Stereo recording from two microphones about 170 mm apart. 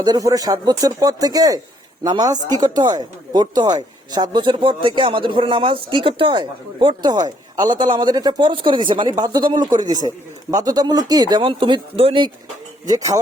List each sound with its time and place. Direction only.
0.0 s speech: 20° right (ahead or behind)
12.9 s speech: 20° right (ahead or behind)